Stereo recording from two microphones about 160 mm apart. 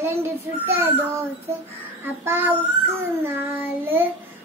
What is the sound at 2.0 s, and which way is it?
Child singing, 15° right (ahead or behind).